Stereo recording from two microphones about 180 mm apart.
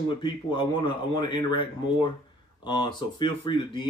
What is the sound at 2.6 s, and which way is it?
Speech, 25° left (ahead or behind).